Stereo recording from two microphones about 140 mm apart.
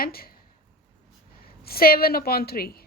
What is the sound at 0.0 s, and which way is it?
Speech, 90° left.